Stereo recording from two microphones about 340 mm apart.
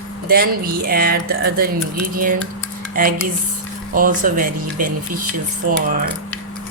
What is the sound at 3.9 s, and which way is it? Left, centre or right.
Speech, right.